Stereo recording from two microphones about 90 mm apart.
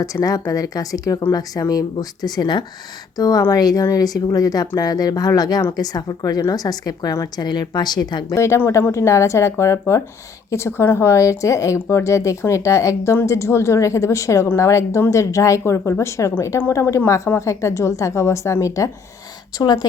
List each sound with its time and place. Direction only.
0.0 s a woman's voice: 40° left (ahead or behind)
8.4 s a woman's voice: 30° left (ahead or behind)
19.5 s speech: 50° left (ahead or behind)